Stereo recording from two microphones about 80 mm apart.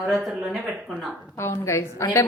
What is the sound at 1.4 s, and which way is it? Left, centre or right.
Speech, left.